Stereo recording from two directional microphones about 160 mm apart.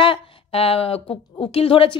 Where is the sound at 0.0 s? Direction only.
30° left (ahead or behind).